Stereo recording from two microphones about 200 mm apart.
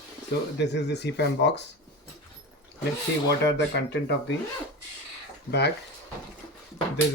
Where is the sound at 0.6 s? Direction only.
60° left (ahead or behind).